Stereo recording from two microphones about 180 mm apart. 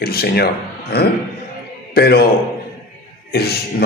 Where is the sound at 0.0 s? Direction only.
60° left (ahead or behind).